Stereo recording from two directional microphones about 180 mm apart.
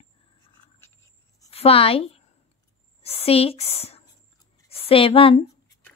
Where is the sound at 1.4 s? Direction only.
35° left (ahead or behind).